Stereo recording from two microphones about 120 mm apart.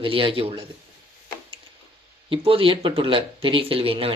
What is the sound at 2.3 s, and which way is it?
Speech, 50° right (ahead or behind).